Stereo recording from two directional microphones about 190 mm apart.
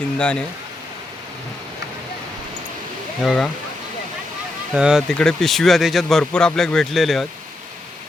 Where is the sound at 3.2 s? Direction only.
Centre (ahead or behind).